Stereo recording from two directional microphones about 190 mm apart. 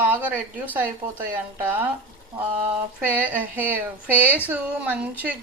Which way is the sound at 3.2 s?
10° right (ahead or behind).